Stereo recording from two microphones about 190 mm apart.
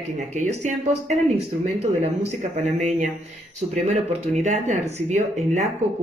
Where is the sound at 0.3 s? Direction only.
35° right (ahead or behind).